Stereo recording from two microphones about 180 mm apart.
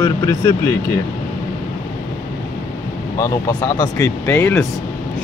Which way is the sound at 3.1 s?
20° left (ahead or behind).